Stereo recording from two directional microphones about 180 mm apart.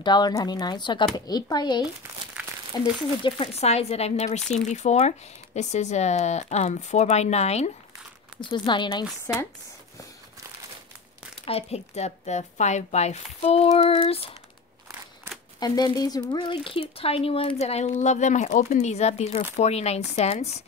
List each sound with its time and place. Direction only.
0.0 s speech: 25° left (ahead or behind)
2.0 s speech: 15° right (ahead or behind)
2.7 s speech: 20° left (ahead or behind)
3.3 s speech: 35° left (ahead or behind)
8.4 s speech: 25° left (ahead or behind)
9.3 s speech: 15° left (ahead or behind)
11.4 s speech: 35° left (ahead or behind)
15.6 s speech: 20° left (ahead or behind); by 20.6 s 35° left (ahead or behind)